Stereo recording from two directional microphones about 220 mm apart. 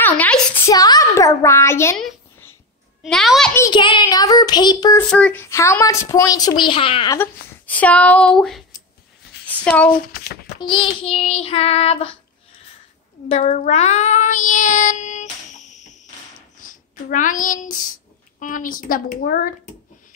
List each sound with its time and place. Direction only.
0.0 s a sound: 10° left (ahead or behind)
2.0 s a sound: centre (ahead or behind)
3.0 s a child's voice: centre (ahead or behind)
3.5 s speech: 15° left (ahead or behind)
5.1 s speech: 5° left (ahead or behind); by 7.2 s 25° left (ahead or behind)
7.2 s speech: 5° left (ahead or behind)
9.7 s a child's voice: 5° left (ahead or behind)
10.6 s child singing: 20° left (ahead or behind)
13.3 s child singing: 30° left (ahead or behind)
16.6 s speech: 35° left (ahead or behind)